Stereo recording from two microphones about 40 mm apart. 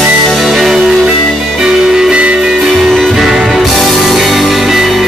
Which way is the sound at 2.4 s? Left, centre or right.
Centre.